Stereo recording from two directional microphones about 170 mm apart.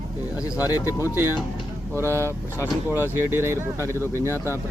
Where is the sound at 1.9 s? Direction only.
15° right (ahead or behind).